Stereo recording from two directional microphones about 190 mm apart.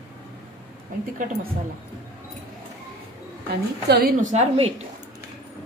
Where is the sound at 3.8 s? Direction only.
60° right (ahead or behind).